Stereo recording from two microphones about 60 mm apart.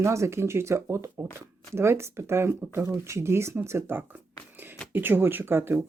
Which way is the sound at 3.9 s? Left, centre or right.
Right.